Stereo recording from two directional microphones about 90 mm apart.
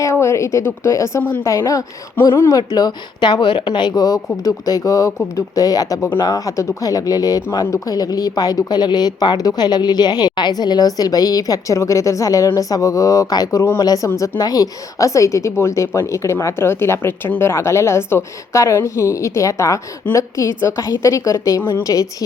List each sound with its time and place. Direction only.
0.0 s a woman's voice: 30° left (ahead or behind)
2.7 s a woman's voice: 55° left (ahead or behind)